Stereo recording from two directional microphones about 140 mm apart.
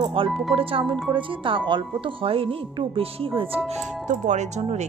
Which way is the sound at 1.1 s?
35° right (ahead or behind).